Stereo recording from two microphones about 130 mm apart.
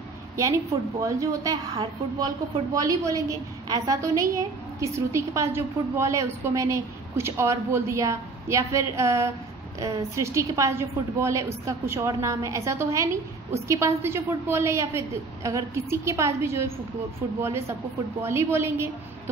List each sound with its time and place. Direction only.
0.4 s a woman's voice: 25° right (ahead or behind)